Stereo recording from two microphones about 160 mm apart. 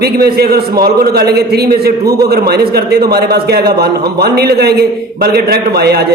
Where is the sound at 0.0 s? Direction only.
80° right.